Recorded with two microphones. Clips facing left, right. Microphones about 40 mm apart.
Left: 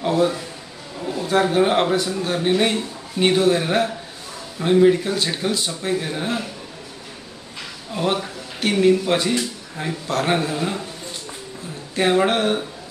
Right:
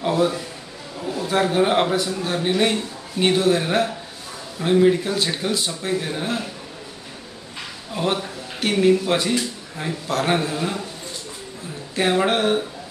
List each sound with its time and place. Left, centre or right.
0.0 s a man's voice: centre
7.9 s a man's voice: centre
11.9 s a man's voice: centre